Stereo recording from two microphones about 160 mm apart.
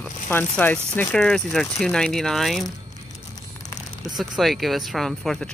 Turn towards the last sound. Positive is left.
turn(degrees=5)  # may be behind; listen again after turning